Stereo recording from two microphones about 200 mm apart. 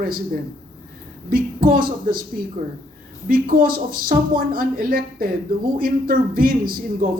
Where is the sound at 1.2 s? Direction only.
45° right (ahead or behind).